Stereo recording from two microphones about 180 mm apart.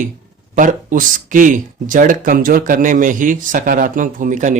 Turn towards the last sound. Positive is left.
turn(degrees=-45)  # may be behind; listen again after turning